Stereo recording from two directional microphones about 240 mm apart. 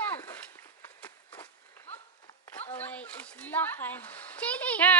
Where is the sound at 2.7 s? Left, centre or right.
Centre.